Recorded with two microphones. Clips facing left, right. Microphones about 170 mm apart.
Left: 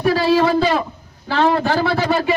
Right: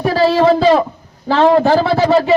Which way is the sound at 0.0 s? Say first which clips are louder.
Right 3 dB; 30° right (ahead or behind).